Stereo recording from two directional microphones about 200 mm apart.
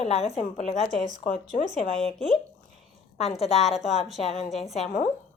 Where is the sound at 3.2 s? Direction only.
30° left (ahead or behind).